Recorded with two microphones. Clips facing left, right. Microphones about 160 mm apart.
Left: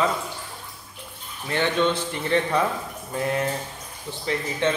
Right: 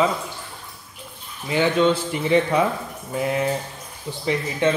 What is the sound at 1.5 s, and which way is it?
A man's voice, 5° right (ahead or behind).